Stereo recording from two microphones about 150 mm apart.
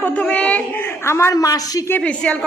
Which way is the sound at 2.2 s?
5° left (ahead or behind).